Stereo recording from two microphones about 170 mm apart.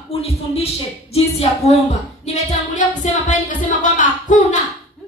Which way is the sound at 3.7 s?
50° left (ahead or behind).